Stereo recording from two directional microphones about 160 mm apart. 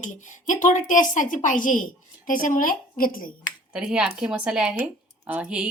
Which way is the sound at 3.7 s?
5° right (ahead or behind).